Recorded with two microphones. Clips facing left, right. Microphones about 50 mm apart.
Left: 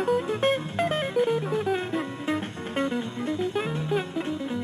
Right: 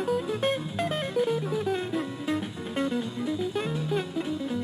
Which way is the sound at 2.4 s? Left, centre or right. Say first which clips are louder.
Left 1 dB; left.